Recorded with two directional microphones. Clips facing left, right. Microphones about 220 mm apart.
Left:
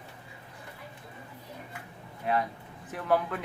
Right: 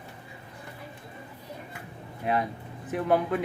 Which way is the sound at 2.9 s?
20° right (ahead or behind).